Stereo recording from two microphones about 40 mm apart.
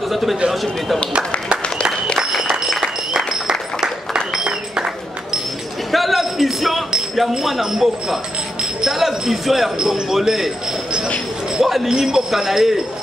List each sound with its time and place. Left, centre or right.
0.1 s speech: centre
3.4 s a sound: centre
5.9 s basketball bounce: centre
7.2 s speech: centre
11.5 s speech: centre
11.9 s speech: centre
12.3 s speech: centre